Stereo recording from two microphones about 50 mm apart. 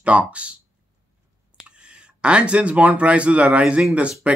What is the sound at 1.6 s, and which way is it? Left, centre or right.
Speech, right.